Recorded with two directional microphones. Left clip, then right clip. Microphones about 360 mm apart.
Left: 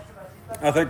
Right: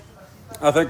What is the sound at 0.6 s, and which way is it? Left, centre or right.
Speech, centre.